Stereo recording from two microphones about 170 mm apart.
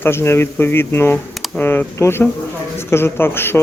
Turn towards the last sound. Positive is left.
turn(degrees=15)  # may be behind; listen again after turning